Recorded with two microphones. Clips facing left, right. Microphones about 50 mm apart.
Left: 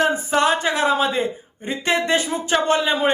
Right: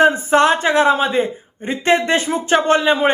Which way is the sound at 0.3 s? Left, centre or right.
Right.